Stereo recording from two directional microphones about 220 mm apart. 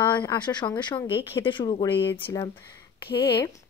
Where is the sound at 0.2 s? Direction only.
20° left (ahead or behind).